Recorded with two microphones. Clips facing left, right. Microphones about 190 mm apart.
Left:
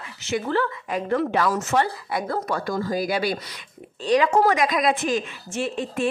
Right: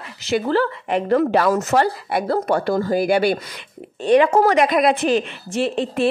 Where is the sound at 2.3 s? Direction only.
30° right (ahead or behind).